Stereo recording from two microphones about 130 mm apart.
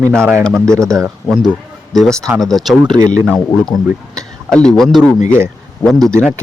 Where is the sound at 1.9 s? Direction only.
5° left (ahead or behind).